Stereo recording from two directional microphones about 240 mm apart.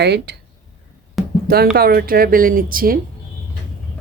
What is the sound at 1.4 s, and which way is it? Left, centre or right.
A woman's voice, right.